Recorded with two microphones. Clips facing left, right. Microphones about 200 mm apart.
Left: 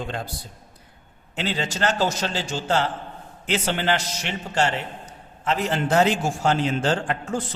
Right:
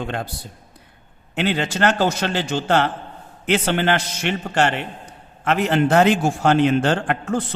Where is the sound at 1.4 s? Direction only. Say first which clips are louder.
Right 5 dB; 60° right (ahead or behind).